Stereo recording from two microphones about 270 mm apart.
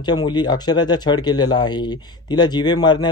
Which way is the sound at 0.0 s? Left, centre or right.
Centre.